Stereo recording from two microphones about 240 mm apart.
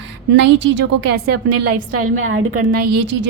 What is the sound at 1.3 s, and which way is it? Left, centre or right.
A woman's voice, right.